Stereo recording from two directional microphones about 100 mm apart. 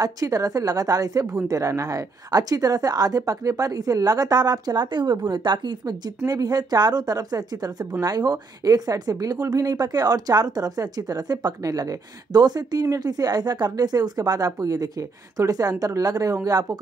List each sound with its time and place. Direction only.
0.0 s a woman's voice: 35° right (ahead or behind)